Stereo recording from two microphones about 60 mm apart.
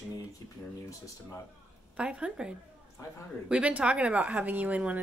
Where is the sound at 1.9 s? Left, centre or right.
Centre.